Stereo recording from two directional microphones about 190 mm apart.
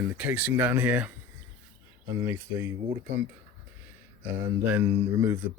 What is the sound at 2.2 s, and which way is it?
Speech, 10° right (ahead or behind).